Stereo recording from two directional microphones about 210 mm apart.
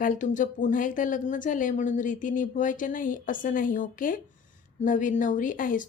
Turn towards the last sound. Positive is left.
turn(degrees=40)  # may be behind; listen again after turning